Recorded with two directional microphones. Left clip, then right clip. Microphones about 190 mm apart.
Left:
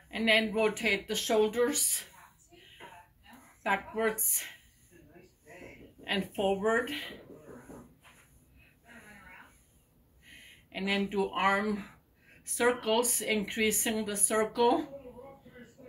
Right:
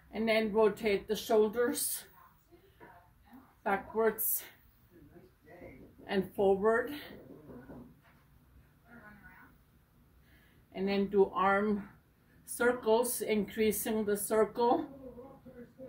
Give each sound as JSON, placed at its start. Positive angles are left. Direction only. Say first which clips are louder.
{"t": 0.1, "sound": "speech", "louder": "left 3 dB", "side_deg": -20}
{"t": 3.6, "sound": "speech", "louder": "left 1 dB", "side_deg": -20}
{"t": 6.0, "sound": "speech", "louder": "right 1 dB", "side_deg": -20}
{"t": 10.7, "sound": "speech", "louder": "even", "side_deg": -20}